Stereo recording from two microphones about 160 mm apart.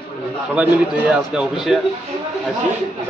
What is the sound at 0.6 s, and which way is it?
A man's voice, 5° right (ahead or behind).